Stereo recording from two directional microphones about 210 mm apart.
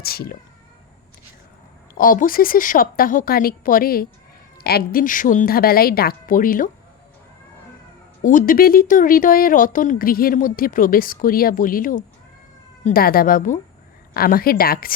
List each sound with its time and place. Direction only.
0.0 s a sound: 45° left (ahead or behind)
2.0 s a woman's voice: 40° left (ahead or behind)
8.2 s a woman's voice: 40° left (ahead or behind)